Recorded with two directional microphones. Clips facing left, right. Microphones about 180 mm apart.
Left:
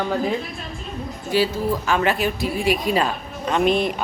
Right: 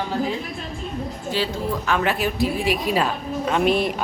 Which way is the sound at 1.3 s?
10° left (ahead or behind).